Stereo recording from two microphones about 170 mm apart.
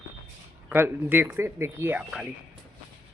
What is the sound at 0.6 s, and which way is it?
A man's voice, 10° right (ahead or behind).